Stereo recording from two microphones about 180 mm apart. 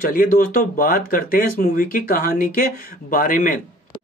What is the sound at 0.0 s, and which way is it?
Speech, 50° left (ahead or behind).